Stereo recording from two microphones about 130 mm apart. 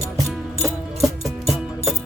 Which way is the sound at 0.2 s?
25° right (ahead or behind).